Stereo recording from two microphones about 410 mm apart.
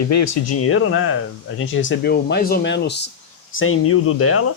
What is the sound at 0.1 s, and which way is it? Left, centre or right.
Speech, left.